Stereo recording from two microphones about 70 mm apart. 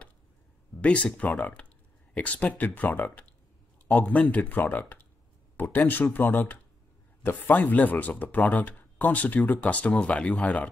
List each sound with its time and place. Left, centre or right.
0.7 s speech: centre